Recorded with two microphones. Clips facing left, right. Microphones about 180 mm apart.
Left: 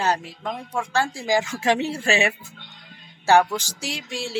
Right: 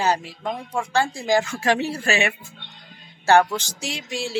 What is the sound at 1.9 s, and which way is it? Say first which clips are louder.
Speech: left 1 dB; 30° left (ahead or behind).